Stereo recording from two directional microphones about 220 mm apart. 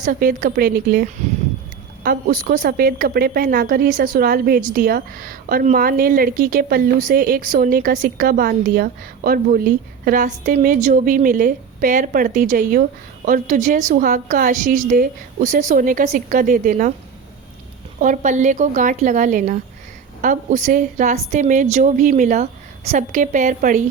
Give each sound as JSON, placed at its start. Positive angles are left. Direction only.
{"t": 0.0, "sound": "a woman's voice", "side_deg": -40}
{"t": 2.0, "sound": "a woman's voice", "side_deg": -40}
{"t": 18.0, "sound": "a woman's voice", "side_deg": -35}